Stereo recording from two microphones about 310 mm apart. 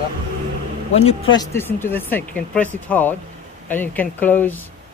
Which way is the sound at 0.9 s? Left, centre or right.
Centre.